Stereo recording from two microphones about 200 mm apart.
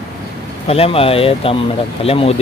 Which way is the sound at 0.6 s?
30° left (ahead or behind).